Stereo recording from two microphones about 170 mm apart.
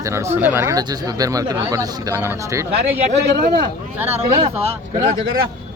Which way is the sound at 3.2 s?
65° right (ahead or behind).